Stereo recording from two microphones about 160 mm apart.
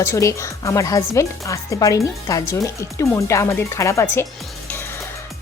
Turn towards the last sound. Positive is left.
turn(degrees=20)  # may be behind; listen again after turning